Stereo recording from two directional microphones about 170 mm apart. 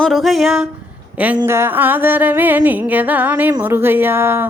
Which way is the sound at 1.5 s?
15° right (ahead or behind).